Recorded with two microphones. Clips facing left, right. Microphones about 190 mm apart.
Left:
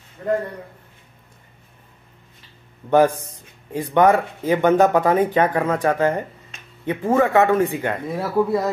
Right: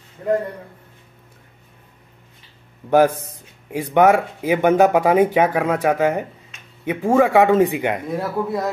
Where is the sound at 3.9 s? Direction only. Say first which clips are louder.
Right 1 dB; 10° right (ahead or behind).